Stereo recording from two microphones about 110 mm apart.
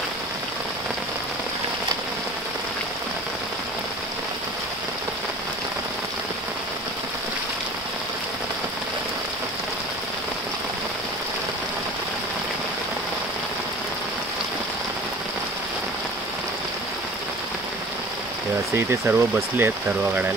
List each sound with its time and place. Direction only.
18.8 s speech: 25° right (ahead or behind)